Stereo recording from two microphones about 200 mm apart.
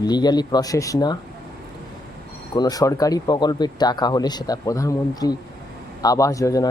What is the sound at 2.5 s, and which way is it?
Speech, 20° left (ahead or behind).